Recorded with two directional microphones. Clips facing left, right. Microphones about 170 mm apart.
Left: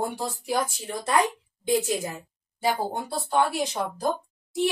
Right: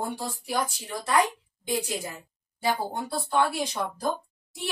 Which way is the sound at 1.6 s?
20° left (ahead or behind).